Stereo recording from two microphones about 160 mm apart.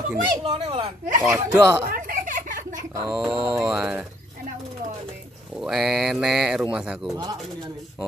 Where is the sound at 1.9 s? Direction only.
60° right (ahead or behind).